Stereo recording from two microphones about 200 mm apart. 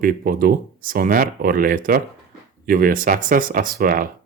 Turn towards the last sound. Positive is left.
turn(degrees=-45)  # may be behind; listen again after turning